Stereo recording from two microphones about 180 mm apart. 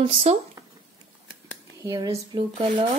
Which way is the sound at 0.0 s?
30° right (ahead or behind).